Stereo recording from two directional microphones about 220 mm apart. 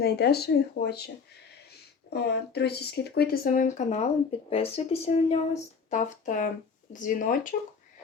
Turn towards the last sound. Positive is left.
turn(degrees=35)  # may be behind; listen again after turning